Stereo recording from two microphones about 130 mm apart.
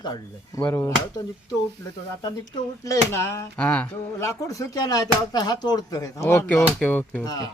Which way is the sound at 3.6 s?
10° left (ahead or behind).